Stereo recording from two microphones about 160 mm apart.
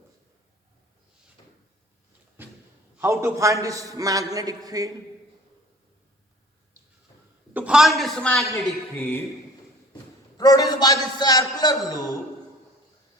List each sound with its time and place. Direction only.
3.0 s a man's voice: 15° right (ahead or behind)
7.5 s a man's voice: 5° right (ahead or behind)
9.0 s a man's voice: 15° left (ahead or behind)
10.3 s a man's voice: 25° left (ahead or behind)